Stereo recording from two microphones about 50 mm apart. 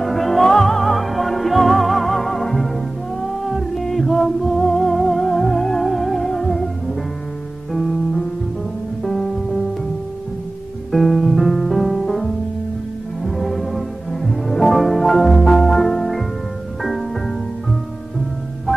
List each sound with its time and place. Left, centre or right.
0.0 s music: centre
10.9 s music: centre